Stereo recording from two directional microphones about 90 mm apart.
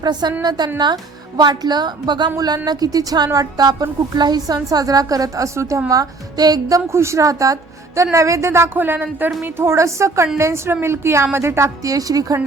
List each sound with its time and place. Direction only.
0.0 s a woman's voice: 50° right (ahead or behind)
2.6 s a woman's voice: 45° right (ahead or behind)
5.9 s a woman's voice: 45° right (ahead or behind)